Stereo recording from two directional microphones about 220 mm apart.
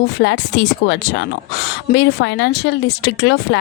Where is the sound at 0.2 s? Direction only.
50° left (ahead or behind).